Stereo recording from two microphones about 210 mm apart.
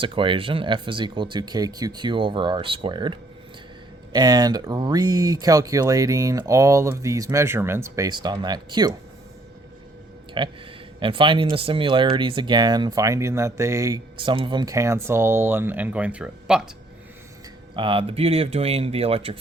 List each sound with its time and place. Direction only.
0.0 s speech: 25° right (ahead or behind)
10.4 s speech: 25° right (ahead or behind); by 16.6 s 5° right (ahead or behind)
17.7 s speech: 25° right (ahead or behind)